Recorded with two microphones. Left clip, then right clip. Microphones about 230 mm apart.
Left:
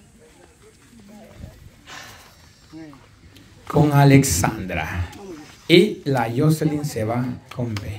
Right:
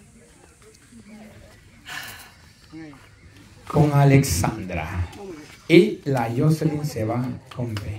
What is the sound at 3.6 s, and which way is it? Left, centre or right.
Speech, centre.